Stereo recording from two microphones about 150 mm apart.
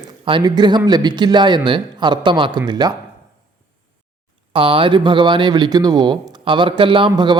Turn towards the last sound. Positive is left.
turn(degrees=-30)  # may be behind; listen again after turning